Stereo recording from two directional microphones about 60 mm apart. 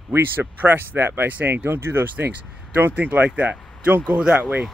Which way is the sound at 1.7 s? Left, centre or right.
Right.